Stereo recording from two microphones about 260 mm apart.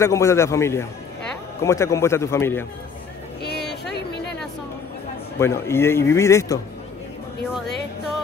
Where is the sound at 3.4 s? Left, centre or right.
Left.